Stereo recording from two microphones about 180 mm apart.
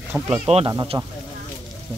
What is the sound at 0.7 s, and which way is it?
Speech, 20° right (ahead or behind).